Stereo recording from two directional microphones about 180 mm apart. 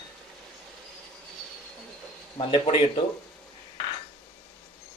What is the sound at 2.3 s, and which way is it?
Speech, 30° left (ahead or behind).